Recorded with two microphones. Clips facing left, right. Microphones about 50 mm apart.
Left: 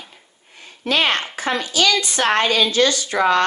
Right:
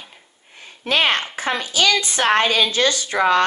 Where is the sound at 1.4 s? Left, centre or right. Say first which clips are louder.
Left 3 dB; right.